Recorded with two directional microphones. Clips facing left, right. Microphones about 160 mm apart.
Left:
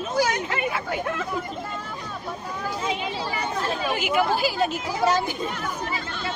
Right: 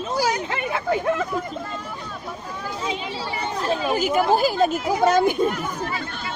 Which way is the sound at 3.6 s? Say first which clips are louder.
Right 7 dB; 35° right (ahead or behind).